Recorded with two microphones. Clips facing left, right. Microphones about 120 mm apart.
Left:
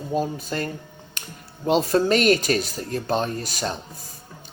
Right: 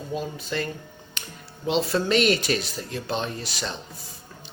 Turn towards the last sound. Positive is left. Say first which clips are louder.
# left 4 dB
turn(degrees=45)  # may be behind; listen again after turning